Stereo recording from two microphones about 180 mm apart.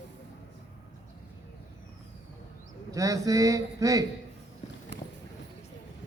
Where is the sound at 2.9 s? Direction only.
20° right (ahead or behind).